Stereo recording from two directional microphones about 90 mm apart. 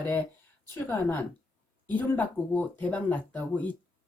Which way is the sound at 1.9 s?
15° left (ahead or behind).